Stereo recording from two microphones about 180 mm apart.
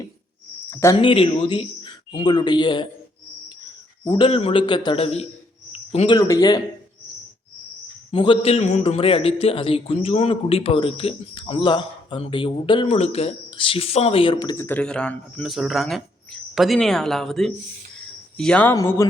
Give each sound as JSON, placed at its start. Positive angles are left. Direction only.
{"t": 0.7, "sound": "a sound", "side_deg": 15}
{"t": 0.9, "sound": "a man's voice", "side_deg": 30}
{"t": 4.2, "sound": "a man's voice", "side_deg": 30}
{"t": 5.7, "sound": "a sound", "side_deg": 35}
{"t": 6.1, "sound": "a man's voice", "side_deg": 20}
{"t": 8.1, "sound": "a man's voice", "side_deg": 25}
{"t": 18.7, "sound": "speech", "side_deg": 15}